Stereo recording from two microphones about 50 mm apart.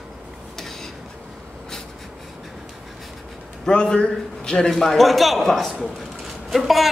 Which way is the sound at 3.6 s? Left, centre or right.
Centre.